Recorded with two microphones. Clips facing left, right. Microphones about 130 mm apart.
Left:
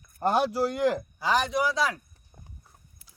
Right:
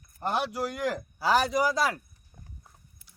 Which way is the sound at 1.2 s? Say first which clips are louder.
Right 1 dB; 5° right (ahead or behind).